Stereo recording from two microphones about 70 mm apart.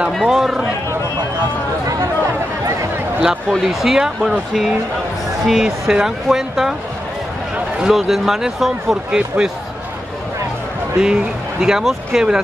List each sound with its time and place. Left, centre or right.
0.1 s speech: centre
3.6 s speech: centre
5.5 s speech: centre
7.9 s speech: centre
11.0 s speech: centre